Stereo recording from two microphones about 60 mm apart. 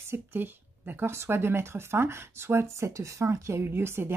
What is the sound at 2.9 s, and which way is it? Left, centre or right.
Speech, right.